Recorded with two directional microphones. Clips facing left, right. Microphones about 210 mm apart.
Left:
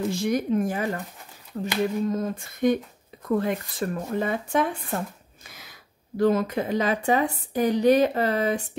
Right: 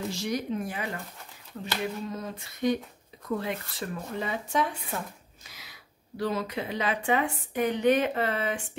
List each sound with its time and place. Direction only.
0.1 s speech: 50° left (ahead or behind)